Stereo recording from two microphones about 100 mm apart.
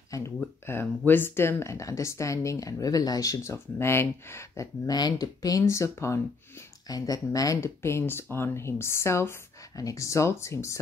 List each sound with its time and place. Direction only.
0.7 s speech: 20° left (ahead or behind)
4.8 s speech: 40° left (ahead or behind)
6.9 s speech: 40° left (ahead or behind)